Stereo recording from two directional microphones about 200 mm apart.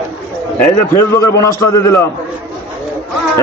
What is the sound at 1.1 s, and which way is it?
A man's voice, 15° left (ahead or behind).